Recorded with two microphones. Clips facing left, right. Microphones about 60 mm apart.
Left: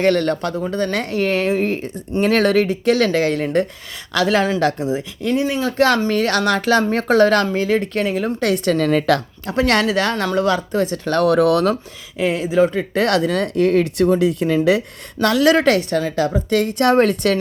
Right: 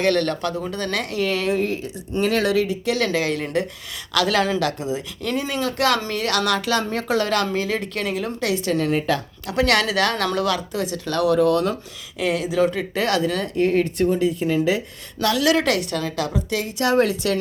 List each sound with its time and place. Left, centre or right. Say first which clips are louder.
0.0 s speech: left 3 dB; left
4.1 s speech: left 3 dB; left
5.2 s speech: left 6 dB; centre
5.6 s speech: left 4 dB; left
8.9 s speech: left 5 dB; left
9.5 s speech: left 3 dB; left
12.1 s speech: left 4 dB; left
12.9 s speech: left 4 dB; left
15.2 s speech: left 5 dB; left
16.5 s speech: left 6 dB; left